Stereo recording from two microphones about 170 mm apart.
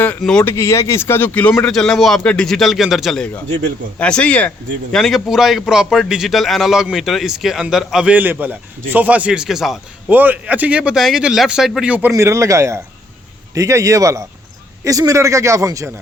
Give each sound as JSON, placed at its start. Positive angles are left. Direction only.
{"t": 0.0, "sound": "speech", "side_deg": 5}
{"t": 0.5, "sound": "a man's voice", "side_deg": 15}
{"t": 12.1, "sound": "a man's voice", "side_deg": -20}